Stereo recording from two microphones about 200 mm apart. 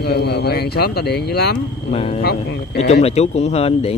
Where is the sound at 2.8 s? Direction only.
30° left (ahead or behind).